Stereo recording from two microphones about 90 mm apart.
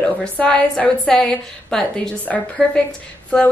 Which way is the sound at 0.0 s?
10° left (ahead or behind).